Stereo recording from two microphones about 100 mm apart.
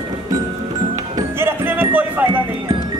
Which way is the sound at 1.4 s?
20° right (ahead or behind).